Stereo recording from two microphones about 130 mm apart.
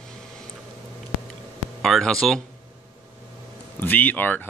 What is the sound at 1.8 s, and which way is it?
Speech, centre (ahead or behind).